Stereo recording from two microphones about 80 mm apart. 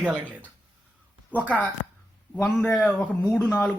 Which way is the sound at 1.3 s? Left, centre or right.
Left.